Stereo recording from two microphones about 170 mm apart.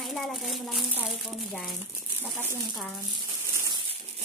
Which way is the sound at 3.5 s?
25° right (ahead or behind).